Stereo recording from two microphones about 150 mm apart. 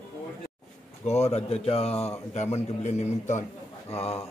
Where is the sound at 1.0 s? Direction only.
45° left (ahead or behind).